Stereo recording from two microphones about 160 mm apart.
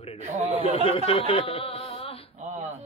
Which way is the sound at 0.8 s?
35° left (ahead or behind).